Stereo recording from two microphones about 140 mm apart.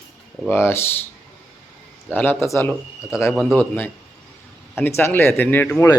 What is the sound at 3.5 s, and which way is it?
A man's voice, 15° left (ahead or behind).